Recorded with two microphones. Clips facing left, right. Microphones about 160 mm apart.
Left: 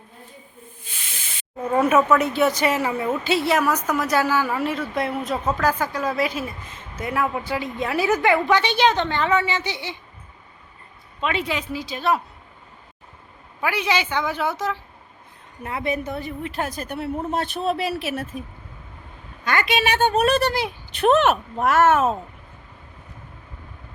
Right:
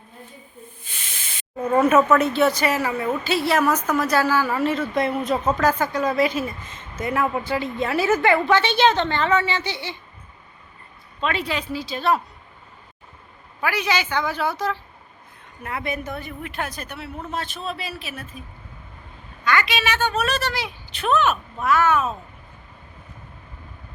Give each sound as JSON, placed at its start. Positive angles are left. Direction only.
{"t": 1.7, "sound": "a woman's voice", "side_deg": 5}
{"t": 11.2, "sound": "a woman's voice", "side_deg": 15}
{"t": 13.6, "sound": "a woman's voice", "side_deg": 25}
{"t": 15.6, "sound": "a woman's voice", "side_deg": 30}
{"t": 17.3, "sound": "speech", "side_deg": 60}
{"t": 19.5, "sound": "a woman's voice", "side_deg": 50}